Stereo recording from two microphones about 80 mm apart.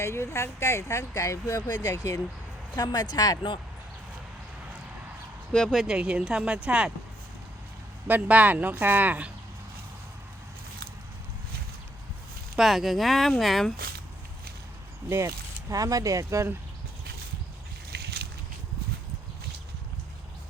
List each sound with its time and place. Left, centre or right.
0.0 s speech: left
2.7 s speech: left
5.5 s speech: centre
5.8 s speech: centre
8.0 s speech: right
12.5 s speech: centre
15.7 s speech: right